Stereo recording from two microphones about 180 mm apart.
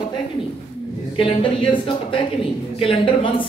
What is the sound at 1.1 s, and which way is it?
A woman's voice, 25° left (ahead or behind).